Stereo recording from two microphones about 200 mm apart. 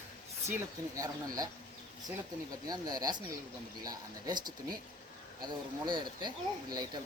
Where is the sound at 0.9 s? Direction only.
15° right (ahead or behind).